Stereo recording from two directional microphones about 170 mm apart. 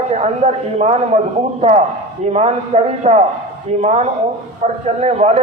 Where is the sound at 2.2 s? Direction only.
40° right (ahead or behind).